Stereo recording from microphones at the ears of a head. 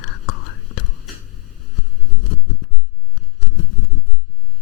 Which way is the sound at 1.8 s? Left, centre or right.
Left.